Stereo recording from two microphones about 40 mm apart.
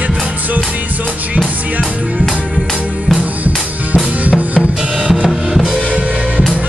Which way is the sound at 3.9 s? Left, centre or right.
Right.